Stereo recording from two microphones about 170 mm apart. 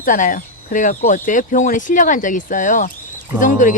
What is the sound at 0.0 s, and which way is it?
Speech, 50° left (ahead or behind).